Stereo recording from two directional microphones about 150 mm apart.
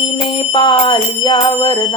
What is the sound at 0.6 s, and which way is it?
Music, 30° left (ahead or behind).